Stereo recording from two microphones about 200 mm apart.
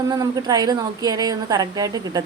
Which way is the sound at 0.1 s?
20° right (ahead or behind).